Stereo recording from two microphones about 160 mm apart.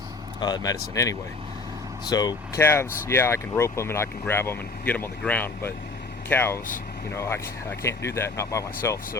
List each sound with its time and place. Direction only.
0.3 s speech: 25° left (ahead or behind)